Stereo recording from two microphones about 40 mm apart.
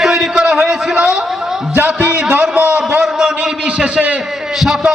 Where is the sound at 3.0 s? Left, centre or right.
Centre.